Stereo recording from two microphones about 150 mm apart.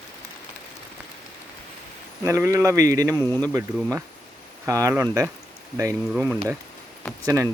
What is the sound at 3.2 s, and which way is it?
Speech, 10° left (ahead or behind).